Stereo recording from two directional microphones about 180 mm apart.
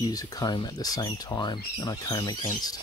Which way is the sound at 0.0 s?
20° left (ahead or behind).